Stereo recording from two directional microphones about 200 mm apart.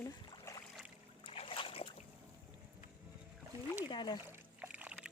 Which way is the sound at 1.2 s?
25° left (ahead or behind).